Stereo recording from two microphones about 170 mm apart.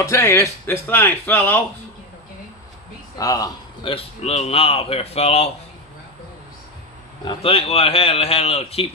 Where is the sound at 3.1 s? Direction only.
20° left (ahead or behind); by 5.5 s 35° left (ahead or behind).